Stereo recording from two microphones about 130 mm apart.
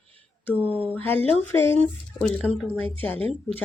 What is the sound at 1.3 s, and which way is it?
Speech, 20° left (ahead or behind).